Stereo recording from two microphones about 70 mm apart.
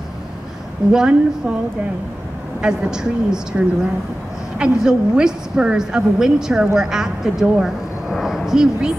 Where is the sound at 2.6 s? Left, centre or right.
Centre.